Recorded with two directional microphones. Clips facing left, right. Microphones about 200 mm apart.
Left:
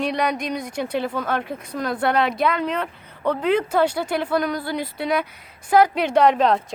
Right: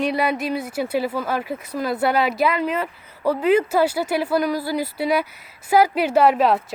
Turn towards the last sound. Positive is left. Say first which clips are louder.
# even
turn(degrees=-5)  # may be behind; listen again after turning